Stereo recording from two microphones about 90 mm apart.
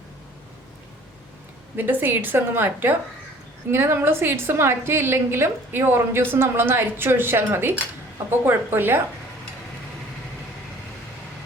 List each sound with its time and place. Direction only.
1.7 s a woman's voice: 20° right (ahead or behind)